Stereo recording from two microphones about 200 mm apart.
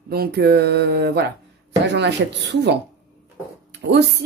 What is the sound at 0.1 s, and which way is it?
Speech, 50° right (ahead or behind).